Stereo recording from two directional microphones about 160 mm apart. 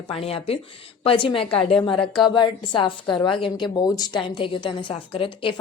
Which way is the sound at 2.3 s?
30° left (ahead or behind).